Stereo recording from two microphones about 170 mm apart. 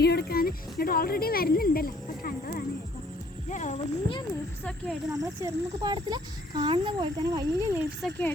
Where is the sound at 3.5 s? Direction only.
45° left (ahead or behind).